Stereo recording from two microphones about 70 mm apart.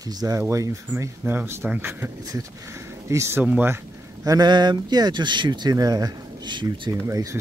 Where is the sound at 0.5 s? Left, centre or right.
Right.